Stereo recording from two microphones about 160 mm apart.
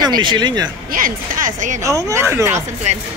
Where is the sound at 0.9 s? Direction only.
60° right (ahead or behind).